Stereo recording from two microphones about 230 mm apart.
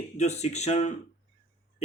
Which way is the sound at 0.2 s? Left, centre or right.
Left.